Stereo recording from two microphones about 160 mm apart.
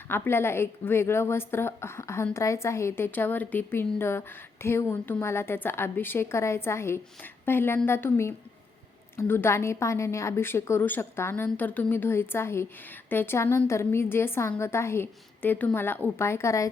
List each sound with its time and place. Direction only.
0.1 s a woman's voice: 15° left (ahead or behind)